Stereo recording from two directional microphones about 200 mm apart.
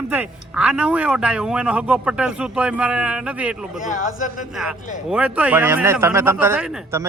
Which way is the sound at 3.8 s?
40° left (ahead or behind).